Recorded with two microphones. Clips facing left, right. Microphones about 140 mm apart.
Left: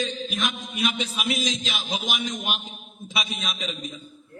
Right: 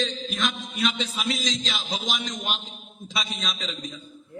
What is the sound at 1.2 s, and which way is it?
Speech, 60° left (ahead or behind).